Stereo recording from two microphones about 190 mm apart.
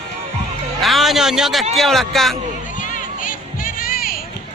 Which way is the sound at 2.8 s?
45° left (ahead or behind).